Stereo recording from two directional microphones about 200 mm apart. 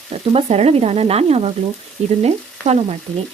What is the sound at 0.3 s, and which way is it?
Frying, 30° right (ahead or behind).